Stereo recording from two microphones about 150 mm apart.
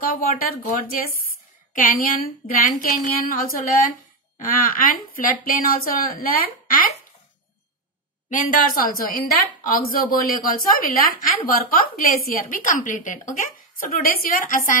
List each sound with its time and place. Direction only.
0.0 s a woman's voice: 65° left (ahead or behind)
8.3 s a woman's voice: 65° left (ahead or behind)